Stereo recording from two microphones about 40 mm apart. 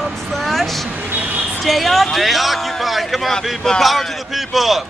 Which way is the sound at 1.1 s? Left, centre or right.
Right.